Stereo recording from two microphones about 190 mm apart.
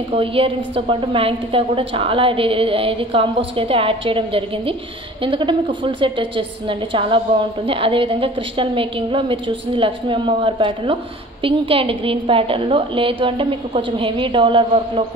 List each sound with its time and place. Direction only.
0.1 s a woman's voice: 30° right (ahead or behind)